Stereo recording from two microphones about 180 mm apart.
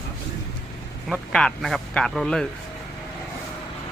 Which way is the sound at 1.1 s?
5° left (ahead or behind).